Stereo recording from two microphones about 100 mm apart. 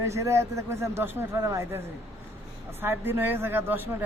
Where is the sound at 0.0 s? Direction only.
30° right (ahead or behind).